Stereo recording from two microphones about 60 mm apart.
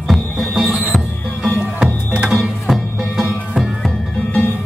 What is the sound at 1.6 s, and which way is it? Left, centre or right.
Music, centre.